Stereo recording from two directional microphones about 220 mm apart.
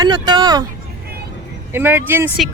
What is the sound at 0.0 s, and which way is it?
Vehicle, 20° right (ahead or behind).